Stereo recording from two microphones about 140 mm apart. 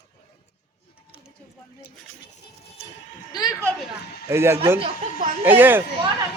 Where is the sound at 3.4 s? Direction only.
25° left (ahead or behind).